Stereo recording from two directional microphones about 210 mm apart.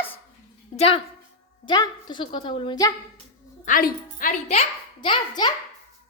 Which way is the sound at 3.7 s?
40° left (ahead or behind).